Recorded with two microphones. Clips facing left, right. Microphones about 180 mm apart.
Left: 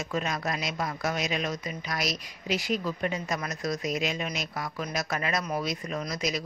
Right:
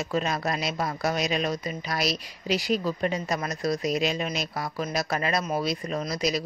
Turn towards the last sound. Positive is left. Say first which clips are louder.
# right 4 dB
turn(degrees=-35)  # may be behind; listen again after turning